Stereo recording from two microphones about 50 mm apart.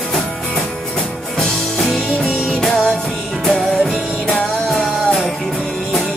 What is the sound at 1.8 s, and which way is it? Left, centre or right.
Music, centre.